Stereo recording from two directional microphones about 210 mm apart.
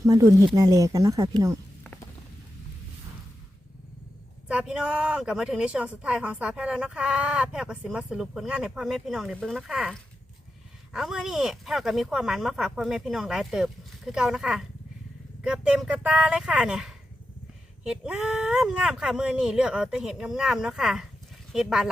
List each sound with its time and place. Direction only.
0.0 s speech: 15° right (ahead or behind)
4.4 s a woman's voice: 5° right (ahead or behind)